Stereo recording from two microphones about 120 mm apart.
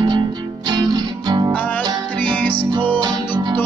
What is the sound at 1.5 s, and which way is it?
Music, 10° left (ahead or behind).